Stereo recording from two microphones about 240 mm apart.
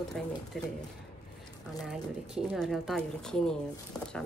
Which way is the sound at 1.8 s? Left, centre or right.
Centre.